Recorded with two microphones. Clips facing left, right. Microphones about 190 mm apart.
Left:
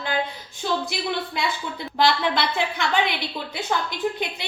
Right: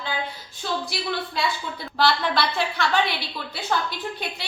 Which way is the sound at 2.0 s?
15° left (ahead or behind).